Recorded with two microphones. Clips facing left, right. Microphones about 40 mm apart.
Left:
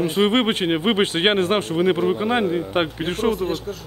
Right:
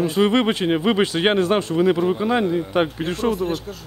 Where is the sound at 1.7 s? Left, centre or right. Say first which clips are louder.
Right 1 dB; left.